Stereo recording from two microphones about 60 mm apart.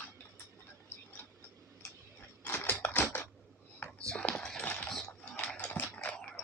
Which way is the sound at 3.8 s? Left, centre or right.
Centre.